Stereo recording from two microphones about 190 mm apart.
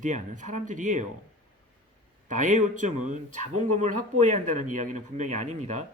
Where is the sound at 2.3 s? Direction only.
40° right (ahead or behind).